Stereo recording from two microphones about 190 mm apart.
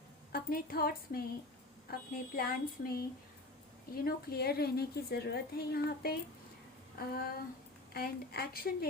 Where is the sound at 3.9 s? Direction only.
55° left (ahead or behind).